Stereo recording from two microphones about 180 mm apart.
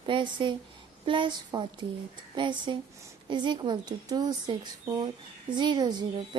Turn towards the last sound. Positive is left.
turn(degrees=-25)  # may be behind; listen again after turning